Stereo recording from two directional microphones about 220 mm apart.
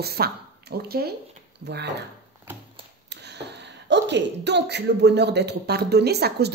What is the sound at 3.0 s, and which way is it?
Speech, 50° right (ahead or behind).